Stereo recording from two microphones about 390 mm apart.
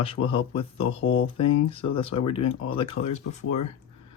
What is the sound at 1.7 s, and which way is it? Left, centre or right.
Speech, centre.